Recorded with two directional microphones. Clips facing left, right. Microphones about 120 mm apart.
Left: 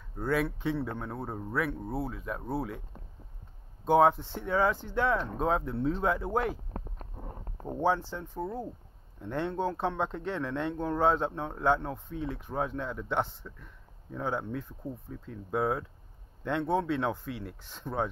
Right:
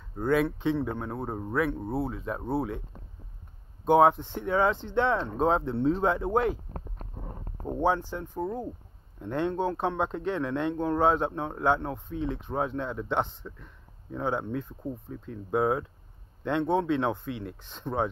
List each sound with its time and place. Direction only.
0.2 s speech: 20° right (ahead or behind)
3.8 s speech: 20° right (ahead or behind)
7.6 s speech: 15° right (ahead or behind)